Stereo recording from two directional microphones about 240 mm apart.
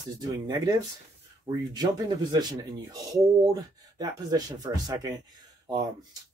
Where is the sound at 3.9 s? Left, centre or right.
Centre.